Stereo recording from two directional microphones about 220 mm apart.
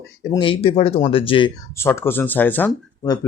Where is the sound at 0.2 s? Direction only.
20° left (ahead or behind).